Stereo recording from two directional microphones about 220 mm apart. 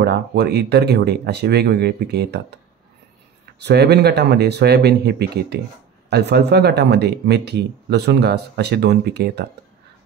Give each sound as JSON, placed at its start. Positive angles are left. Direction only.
{"t": 0.0, "sound": "speech", "side_deg": -50}
{"t": 3.6, "sound": "speech", "side_deg": -50}